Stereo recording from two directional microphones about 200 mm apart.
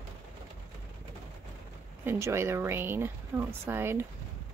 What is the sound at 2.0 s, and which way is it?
Speech, 15° right (ahead or behind).